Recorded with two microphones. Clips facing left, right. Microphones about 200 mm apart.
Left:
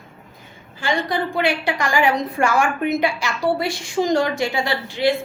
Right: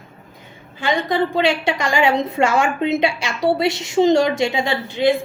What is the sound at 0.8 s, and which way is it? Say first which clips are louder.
A woman's voice: right 3 dB; 20° right (ahead or behind).